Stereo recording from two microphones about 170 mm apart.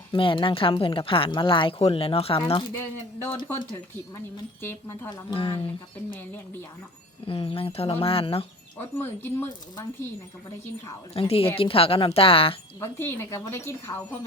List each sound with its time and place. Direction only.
0.1 s speech: 30° left (ahead or behind)
2.7 s speech: 15° left (ahead or behind)
4.6 s speech: 10° left (ahead or behind)
5.0 s speech: 30° left (ahead or behind)
6.1 s speech: 10° left (ahead or behind)
7.3 s speech: 35° left (ahead or behind)
8.8 s speech: 15° left (ahead or behind)
11.1 s speech: 35° left (ahead or behind)
12.8 s speech: 15° left (ahead or behind)